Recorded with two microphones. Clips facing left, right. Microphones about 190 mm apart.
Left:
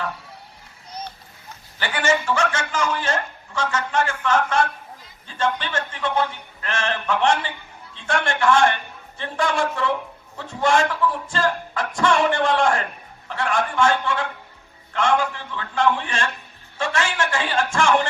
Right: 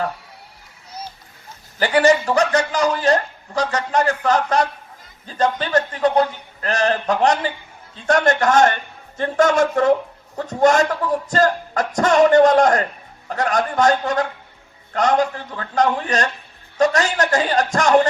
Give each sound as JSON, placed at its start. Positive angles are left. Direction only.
{"t": 1.8, "sound": "a man's voice", "side_deg": -35}